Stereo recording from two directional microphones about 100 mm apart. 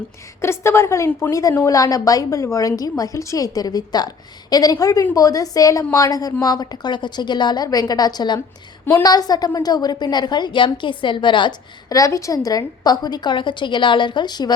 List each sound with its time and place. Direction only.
0.4 s a woman's voice: 25° left (ahead or behind)
1.3 s a woman's voice: 35° left (ahead or behind); by 11.5 s 50° left (ahead or behind)
11.9 s a woman's voice: 35° left (ahead or behind)